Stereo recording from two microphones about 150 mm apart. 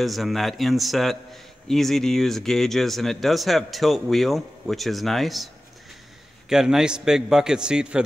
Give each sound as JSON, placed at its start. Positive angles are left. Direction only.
{"t": 0.0, "sound": "a man's voice", "side_deg": 0}
{"t": 6.5, "sound": "a man's voice", "side_deg": -5}